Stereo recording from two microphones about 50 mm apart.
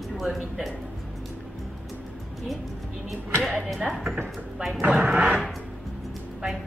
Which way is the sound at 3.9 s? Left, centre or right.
Centre.